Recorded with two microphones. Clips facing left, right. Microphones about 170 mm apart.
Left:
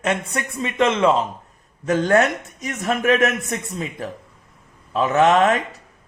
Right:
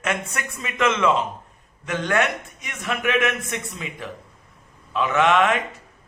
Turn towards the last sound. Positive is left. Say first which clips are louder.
# left 3 dB
turn(degrees=35)  # may be behind; listen again after turning